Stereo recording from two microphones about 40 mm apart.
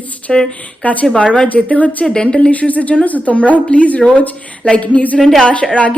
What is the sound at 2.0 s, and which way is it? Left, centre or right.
A woman's voice, left.